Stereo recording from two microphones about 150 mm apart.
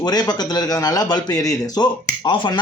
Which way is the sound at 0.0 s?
25° left (ahead or behind).